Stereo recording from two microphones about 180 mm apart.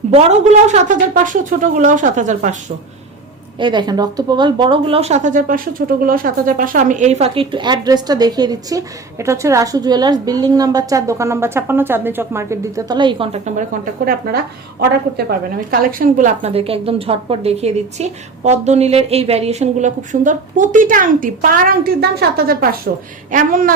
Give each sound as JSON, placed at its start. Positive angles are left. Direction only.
{"t": 0.1, "sound": "speech", "side_deg": -40}
{"t": 3.6, "sound": "a woman's voice", "side_deg": -25}
{"t": 23.3, "sound": "speech", "side_deg": -50}